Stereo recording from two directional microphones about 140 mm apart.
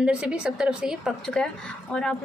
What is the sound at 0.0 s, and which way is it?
A woman's voice, 5° right (ahead or behind).